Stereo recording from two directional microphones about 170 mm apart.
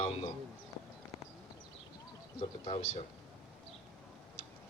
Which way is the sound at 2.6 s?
30° left (ahead or behind).